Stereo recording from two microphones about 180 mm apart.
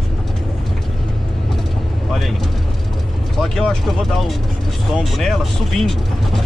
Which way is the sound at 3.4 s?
Centre (ahead or behind).